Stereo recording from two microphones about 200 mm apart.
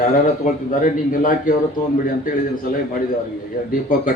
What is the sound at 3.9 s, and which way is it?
Speech, 45° left (ahead or behind).